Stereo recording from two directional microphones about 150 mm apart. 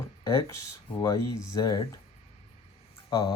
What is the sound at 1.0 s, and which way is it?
Speech, 25° left (ahead or behind).